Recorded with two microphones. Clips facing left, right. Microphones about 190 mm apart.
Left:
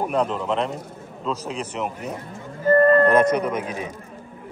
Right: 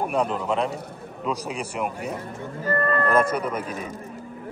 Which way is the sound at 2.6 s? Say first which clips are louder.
Left 9 dB; 30° left (ahead or behind).